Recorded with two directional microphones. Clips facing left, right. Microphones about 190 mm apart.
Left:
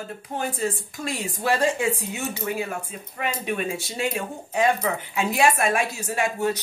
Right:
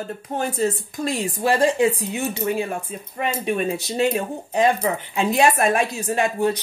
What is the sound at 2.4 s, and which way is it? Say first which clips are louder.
Speech: right 4 dB; 30° right (ahead or behind).